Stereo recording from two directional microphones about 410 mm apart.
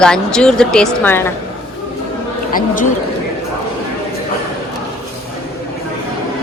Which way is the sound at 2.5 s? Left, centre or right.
Centre.